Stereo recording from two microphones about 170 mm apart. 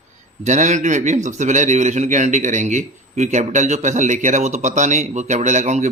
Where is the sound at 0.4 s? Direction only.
45° right (ahead or behind).